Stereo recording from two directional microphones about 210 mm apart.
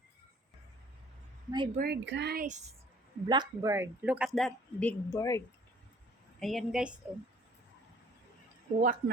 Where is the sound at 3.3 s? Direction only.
20° right (ahead or behind); by 5.4 s 15° left (ahead or behind).